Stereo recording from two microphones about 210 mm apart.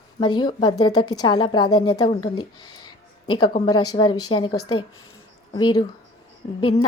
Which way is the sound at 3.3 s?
20° left (ahead or behind).